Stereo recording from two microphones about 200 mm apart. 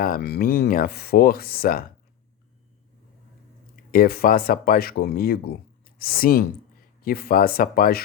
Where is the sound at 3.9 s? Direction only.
45° left (ahead or behind).